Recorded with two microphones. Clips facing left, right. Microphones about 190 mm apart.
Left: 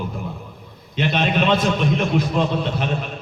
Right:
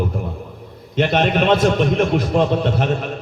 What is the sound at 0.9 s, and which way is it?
A man's voice, 55° right (ahead or behind).